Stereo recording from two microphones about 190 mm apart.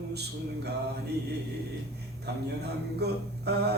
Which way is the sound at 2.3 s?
60° right (ahead or behind).